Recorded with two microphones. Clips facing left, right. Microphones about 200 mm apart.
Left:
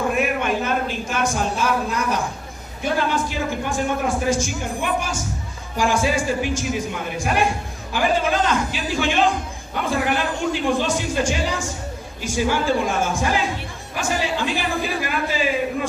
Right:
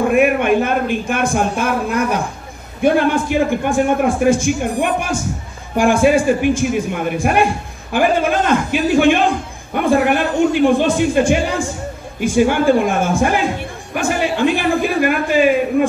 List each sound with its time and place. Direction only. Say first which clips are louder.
0.1 s a man's voice: right 8 dB; 55° right (ahead or behind)
12.2 s music: right 8 dB; 55° right (ahead or behind)